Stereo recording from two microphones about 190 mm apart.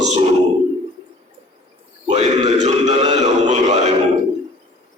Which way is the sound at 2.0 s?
35° right (ahead or behind).